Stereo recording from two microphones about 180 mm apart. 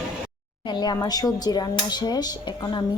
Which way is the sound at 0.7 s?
25° left (ahead or behind).